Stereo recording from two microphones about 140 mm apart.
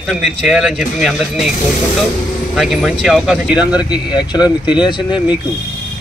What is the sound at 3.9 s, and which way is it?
Speech, 30° left (ahead or behind).